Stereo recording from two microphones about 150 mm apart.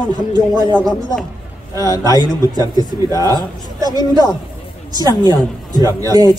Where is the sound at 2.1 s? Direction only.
25° left (ahead or behind).